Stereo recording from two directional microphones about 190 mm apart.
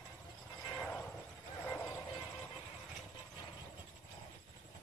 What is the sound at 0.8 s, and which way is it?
Vehicle, 5° left (ahead or behind).